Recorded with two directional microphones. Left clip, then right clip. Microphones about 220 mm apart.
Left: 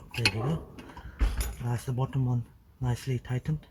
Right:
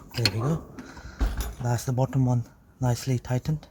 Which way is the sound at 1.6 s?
45° right (ahead or behind).